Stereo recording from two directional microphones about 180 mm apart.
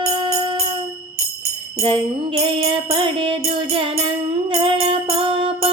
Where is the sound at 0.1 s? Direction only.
25° right (ahead or behind).